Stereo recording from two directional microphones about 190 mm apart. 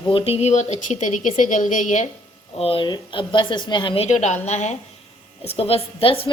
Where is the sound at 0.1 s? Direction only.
30° left (ahead or behind).